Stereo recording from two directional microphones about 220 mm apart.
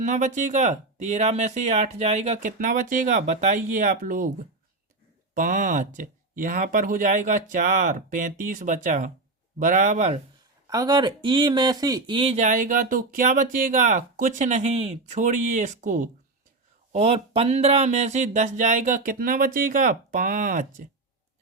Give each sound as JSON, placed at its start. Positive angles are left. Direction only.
{"t": 0.0, "sound": "speech", "side_deg": -35}
{"t": 5.3, "sound": "speech", "side_deg": -35}
{"t": 10.7, "sound": "speech", "side_deg": -15}